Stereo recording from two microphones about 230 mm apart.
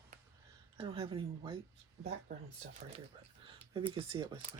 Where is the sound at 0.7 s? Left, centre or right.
Right.